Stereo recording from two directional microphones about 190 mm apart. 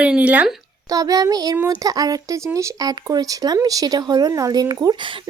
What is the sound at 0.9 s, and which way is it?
Speech, 20° right (ahead or behind).